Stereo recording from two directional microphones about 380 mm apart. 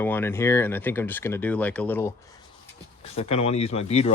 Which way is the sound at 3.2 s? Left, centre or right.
Centre.